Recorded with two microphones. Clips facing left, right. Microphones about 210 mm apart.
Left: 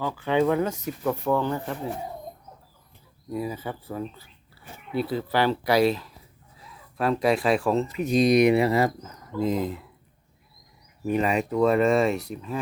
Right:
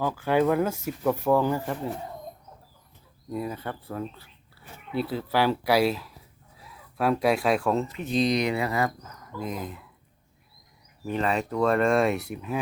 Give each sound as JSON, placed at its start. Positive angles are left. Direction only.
{"t": 0.0, "sound": "speech", "side_deg": -10}
{"t": 3.3, "sound": "speech", "side_deg": 5}
{"t": 8.3, "sound": "speech", "side_deg": 20}
{"t": 11.0, "sound": "speech", "side_deg": 10}